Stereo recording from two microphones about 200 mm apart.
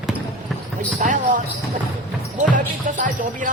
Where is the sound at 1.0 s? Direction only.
40° right (ahead or behind).